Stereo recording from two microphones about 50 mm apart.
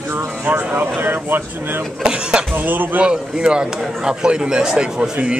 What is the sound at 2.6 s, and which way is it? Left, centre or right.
Speech, right.